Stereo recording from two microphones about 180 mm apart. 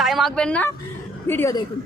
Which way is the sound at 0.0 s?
Centre (ahead or behind).